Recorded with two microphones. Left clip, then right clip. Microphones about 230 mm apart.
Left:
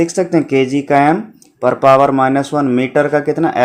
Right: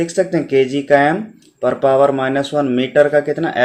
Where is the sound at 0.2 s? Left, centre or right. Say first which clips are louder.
Right 2 dB; left.